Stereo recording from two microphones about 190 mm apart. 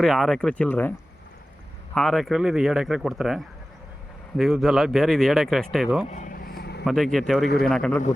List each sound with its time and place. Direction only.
0.0 s speech: centre (ahead or behind)
2.0 s speech: centre (ahead or behind)
6.1 s vehicle: 40° left (ahead or behind); by 6.8 s 55° left (ahead or behind)
6.8 s speech: centre (ahead or behind)